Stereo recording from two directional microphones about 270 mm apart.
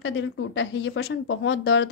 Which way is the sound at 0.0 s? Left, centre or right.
Left.